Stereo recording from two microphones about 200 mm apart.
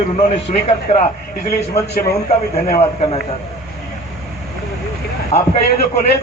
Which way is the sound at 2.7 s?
35° left (ahead or behind).